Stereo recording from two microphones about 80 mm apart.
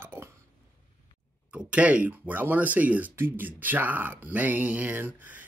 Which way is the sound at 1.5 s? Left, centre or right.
Centre.